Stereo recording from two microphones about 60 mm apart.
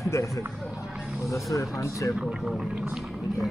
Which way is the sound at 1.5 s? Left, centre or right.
Left.